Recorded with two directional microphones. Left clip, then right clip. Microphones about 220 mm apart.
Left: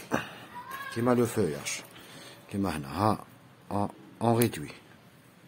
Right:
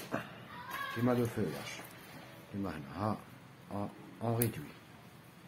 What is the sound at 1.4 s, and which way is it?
Speech, 55° left (ahead or behind).